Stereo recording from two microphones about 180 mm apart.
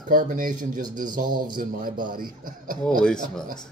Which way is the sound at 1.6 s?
50° right (ahead or behind).